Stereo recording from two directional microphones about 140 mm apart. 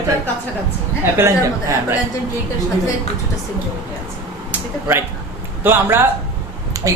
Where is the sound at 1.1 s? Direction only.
20° right (ahead or behind).